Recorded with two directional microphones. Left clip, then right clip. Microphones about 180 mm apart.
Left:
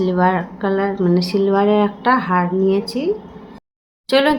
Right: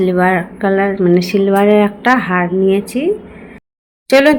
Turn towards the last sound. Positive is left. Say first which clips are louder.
# right 6 dB
turn(degrees=-20)  # may be behind; listen again after turning